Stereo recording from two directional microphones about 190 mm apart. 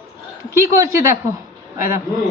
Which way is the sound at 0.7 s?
15° right (ahead or behind).